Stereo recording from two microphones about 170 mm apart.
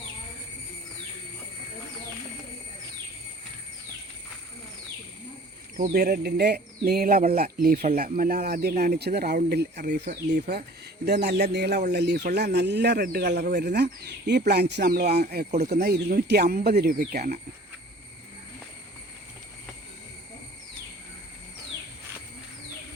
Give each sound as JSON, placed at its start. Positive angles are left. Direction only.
{"t": 5.7, "sound": "speech", "side_deg": -60}
{"t": 10.2, "sound": "speech", "side_deg": -75}